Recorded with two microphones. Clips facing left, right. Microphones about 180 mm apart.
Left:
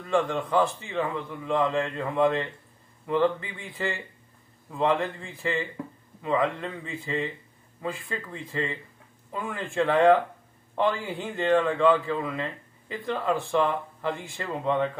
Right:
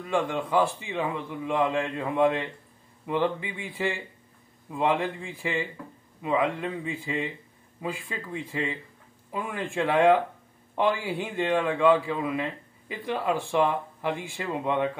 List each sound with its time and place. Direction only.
0.0 s speech: 5° right (ahead or behind)